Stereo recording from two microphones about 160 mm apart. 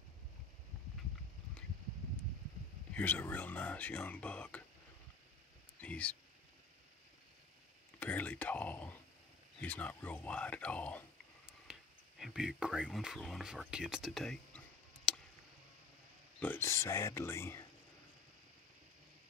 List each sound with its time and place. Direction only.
2.9 s speech: 10° left (ahead or behind)
5.8 s speech: 10° left (ahead or behind)
8.0 s speech: 10° left (ahead or behind)
11.7 s a sound: 5° right (ahead or behind)
12.2 s speech: 5° right (ahead or behind)
15.1 s a sound: 5° left (ahead or behind)
16.3 s speech: 15° left (ahead or behind)